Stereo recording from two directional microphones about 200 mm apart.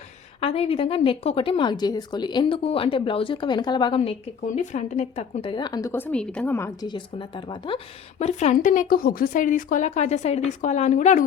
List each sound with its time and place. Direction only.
0.4 s a woman's voice: 30° left (ahead or behind); by 6.7 s 10° left (ahead or behind)
6.8 s a woman's voice: 25° left (ahead or behind)
8.2 s speech: 35° left (ahead or behind)